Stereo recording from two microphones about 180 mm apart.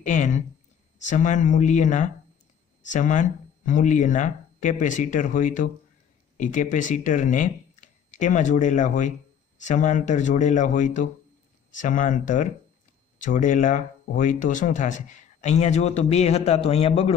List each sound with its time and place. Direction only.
0.0 s speech: 45° left (ahead or behind)